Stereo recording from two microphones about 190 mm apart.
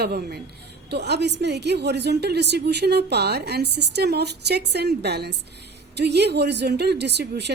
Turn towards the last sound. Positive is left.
turn(degrees=-60)  # may be behind; listen again after turning